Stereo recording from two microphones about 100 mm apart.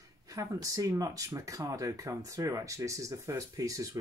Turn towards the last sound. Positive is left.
turn(degrees=-35)  # may be behind; listen again after turning